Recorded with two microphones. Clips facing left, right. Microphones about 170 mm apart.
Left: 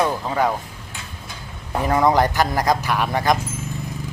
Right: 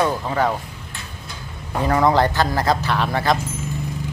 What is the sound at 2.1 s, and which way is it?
Speech, 15° left (ahead or behind).